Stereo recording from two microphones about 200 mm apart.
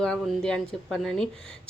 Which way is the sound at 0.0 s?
5° left (ahead or behind).